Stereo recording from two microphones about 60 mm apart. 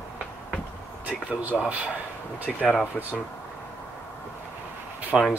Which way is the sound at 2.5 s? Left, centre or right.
Centre.